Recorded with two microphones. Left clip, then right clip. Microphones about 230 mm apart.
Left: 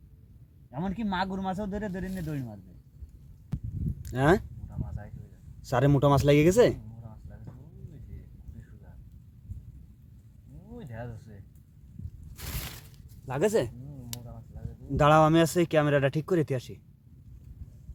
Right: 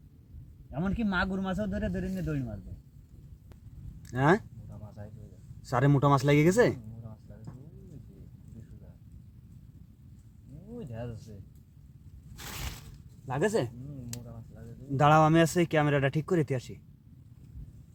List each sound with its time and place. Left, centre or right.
0.7 s speech: centre
4.0 s speech: left
5.6 s speech: left
10.8 s a sound: centre
13.2 s speech: left
14.9 s speech: left